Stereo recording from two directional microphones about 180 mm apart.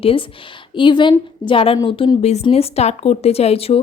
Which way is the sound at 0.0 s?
30° left (ahead or behind).